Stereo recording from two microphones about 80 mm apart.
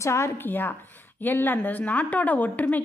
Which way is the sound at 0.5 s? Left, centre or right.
Left.